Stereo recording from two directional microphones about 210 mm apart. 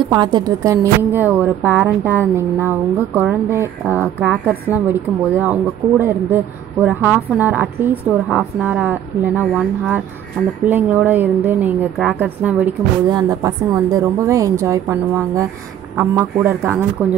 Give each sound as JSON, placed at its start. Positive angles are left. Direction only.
{"t": 0.0, "sound": "a woman's voice", "side_deg": -20}
{"t": 0.7, "sound": "a woman's voice", "side_deg": -5}
{"t": 10.6, "sound": "a woman's voice", "side_deg": -10}
{"t": 13.1, "sound": "a woman's voice", "side_deg": -20}